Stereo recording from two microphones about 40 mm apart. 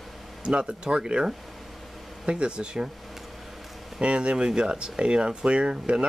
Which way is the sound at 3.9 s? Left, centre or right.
Right.